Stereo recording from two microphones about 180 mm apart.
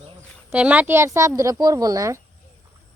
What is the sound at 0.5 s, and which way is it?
A woman's voice, 10° right (ahead or behind).